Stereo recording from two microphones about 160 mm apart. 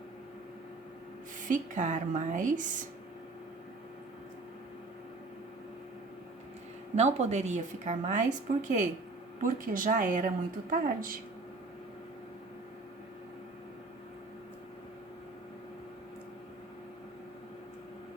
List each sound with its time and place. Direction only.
1.4 s speech: 55° right (ahead or behind)
6.9 s speech: 45° right (ahead or behind); by 11.2 s 60° right (ahead or behind)